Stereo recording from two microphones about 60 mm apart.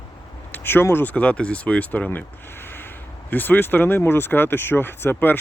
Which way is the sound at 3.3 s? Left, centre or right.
Left.